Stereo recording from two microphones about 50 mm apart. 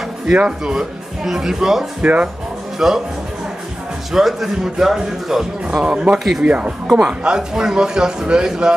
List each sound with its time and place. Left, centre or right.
0.3 s a man's voice: centre
2.0 s speech: right
2.8 s a man's voice: centre
4.1 s a man's voice: centre
5.7 s speech: right
6.1 s a man's voice: centre
6.4 s a man's voice: right